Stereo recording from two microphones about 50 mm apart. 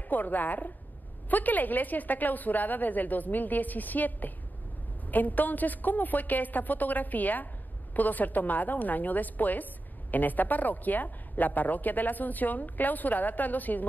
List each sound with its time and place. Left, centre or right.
0.1 s a woman's voice: left